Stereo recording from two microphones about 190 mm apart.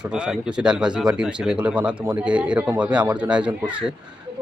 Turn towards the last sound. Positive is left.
turn(degrees=-5)  # may be behind; listen again after turning